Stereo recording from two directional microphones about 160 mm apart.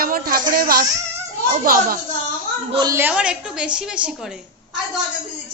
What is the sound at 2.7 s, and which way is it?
Speech, 25° right (ahead or behind).